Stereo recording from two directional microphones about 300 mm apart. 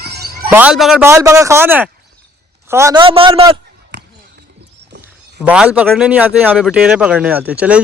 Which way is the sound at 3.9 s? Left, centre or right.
Right.